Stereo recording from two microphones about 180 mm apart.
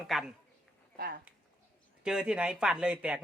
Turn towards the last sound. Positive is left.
turn(degrees=-5)  # may be behind; listen again after turning